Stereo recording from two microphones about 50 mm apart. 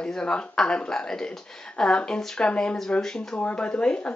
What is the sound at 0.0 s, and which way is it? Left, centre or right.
Speech, centre.